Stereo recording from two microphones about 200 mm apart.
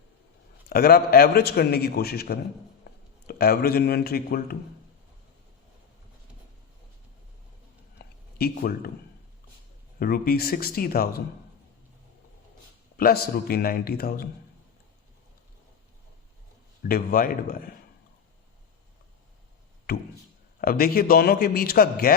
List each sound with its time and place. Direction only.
0.7 s a man's voice: 50° left (ahead or behind)
7.9 s a sound: 50° left (ahead or behind)
10.0 s a man's voice: 50° left (ahead or behind)
13.0 s a man's voice: 50° left (ahead or behind)
16.8 s a man's voice: 45° left (ahead or behind)
19.9 s a man's voice: 50° left (ahead or behind)